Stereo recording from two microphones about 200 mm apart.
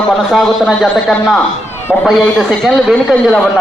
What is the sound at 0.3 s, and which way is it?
A man's voice, centre (ahead or behind).